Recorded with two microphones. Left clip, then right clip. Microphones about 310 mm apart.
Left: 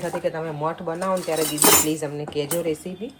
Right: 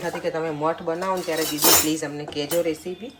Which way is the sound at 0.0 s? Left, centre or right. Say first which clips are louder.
Even; centre.